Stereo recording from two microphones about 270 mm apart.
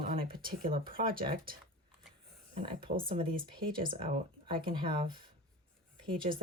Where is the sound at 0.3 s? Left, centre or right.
Right.